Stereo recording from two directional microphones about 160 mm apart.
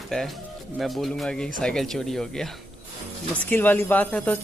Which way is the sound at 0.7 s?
Centre (ahead or behind).